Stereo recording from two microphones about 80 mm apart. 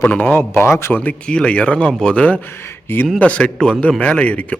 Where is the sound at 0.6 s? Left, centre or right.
Left.